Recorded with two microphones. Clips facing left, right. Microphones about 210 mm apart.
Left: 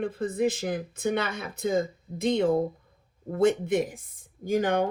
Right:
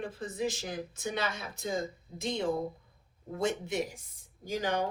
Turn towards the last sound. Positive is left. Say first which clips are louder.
# left 7 dB
turn(degrees=55)  # may be behind; listen again after turning